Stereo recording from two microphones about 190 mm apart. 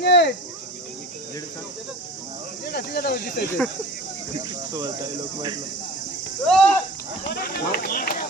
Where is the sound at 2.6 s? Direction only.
55° left (ahead or behind).